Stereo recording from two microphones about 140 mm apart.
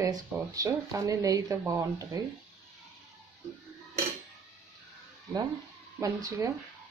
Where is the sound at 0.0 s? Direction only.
25° right (ahead or behind).